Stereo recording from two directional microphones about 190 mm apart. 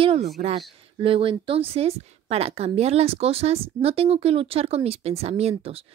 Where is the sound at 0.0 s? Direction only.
30° right (ahead or behind).